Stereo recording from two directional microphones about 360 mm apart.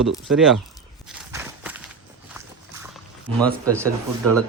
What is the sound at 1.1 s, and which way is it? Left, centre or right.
Walk, centre.